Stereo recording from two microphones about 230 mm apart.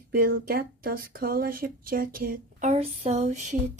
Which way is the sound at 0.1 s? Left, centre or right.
Right.